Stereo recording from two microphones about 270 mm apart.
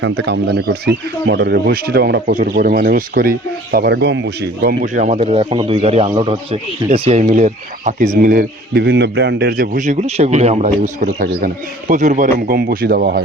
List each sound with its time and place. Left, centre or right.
0.0 s speech: right